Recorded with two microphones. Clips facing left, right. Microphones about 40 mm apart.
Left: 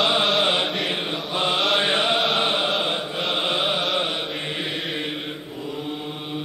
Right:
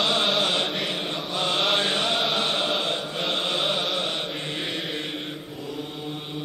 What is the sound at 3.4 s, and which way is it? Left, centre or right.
Mantra, centre.